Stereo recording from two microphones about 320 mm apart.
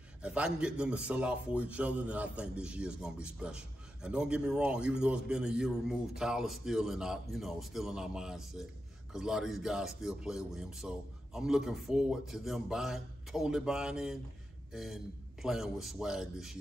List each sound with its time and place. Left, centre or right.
0.2 s a man's voice: centre